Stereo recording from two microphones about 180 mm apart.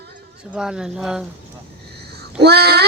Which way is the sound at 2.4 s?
65° right (ahead or behind).